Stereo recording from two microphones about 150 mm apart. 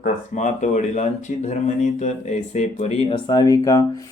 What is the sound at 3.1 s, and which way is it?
Speech, 25° left (ahead or behind).